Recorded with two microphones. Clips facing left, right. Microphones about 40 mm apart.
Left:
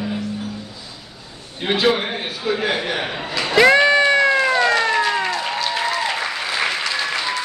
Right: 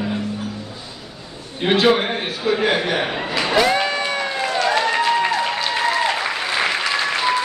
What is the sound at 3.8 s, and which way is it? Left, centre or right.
Cat, left.